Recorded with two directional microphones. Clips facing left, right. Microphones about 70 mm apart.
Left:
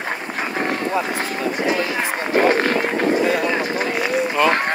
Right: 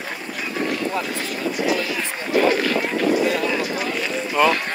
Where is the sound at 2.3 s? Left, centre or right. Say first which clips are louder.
Left 1 dB; left.